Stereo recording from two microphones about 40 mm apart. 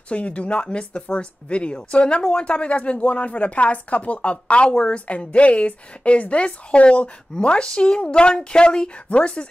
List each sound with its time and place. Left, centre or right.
0.1 s speech: left